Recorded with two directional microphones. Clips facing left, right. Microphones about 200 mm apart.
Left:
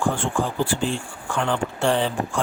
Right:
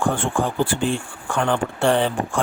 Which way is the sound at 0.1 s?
55° right (ahead or behind).